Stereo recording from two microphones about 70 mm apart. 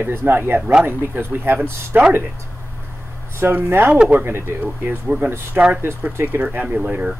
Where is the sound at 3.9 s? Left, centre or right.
Centre.